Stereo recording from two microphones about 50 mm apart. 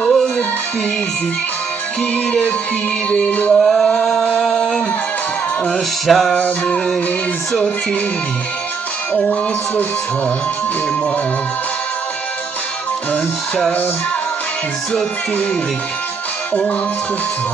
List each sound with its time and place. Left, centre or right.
0.0 s music: centre
3.3 s music: left
3.5 s a sound: centre
4.0 s music: centre
4.4 s singing: centre
5.7 s music: centre
6.3 s music: left
9.1 s music: left